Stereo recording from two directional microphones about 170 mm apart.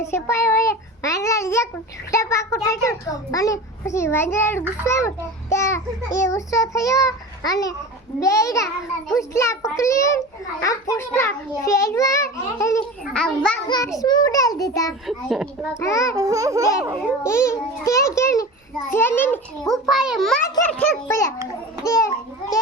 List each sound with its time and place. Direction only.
0.0 s a child's voice: 15° left (ahead or behind)
13.1 s a child's voice: 5° left (ahead or behind)
13.7 s a child's voice: 25° left (ahead or behind)
15.0 s a child's voice: centre (ahead or behind)
15.7 s a child's voice: 20° left (ahead or behind)
16.1 s laughter: 20° right (ahead or behind)
17.2 s a child's voice: 15° left (ahead or behind)
19.6 s a child's voice: centre (ahead or behind)
21.8 s a child's voice: 20° left (ahead or behind)